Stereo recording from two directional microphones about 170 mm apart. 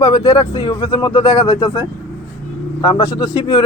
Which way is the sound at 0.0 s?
25° left (ahead or behind).